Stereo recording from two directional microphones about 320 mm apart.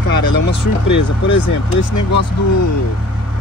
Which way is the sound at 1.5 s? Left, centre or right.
Left.